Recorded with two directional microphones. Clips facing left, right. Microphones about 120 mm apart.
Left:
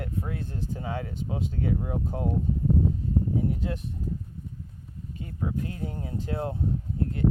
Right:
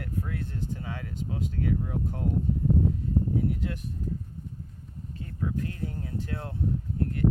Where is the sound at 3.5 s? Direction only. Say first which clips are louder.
Left 2 dB; 25° left (ahead or behind).